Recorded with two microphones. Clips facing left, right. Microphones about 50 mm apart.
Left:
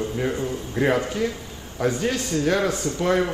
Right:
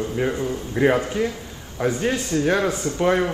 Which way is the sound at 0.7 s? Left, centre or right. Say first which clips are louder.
Right 3 dB; centre.